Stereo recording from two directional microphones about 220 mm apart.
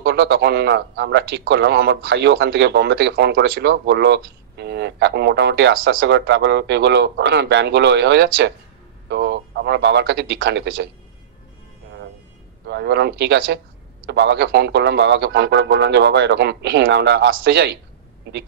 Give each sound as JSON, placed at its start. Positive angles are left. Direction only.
{"t": 0.0, "sound": "a man's voice", "side_deg": -50}
{"t": 12.6, "sound": "a man's voice", "side_deg": -50}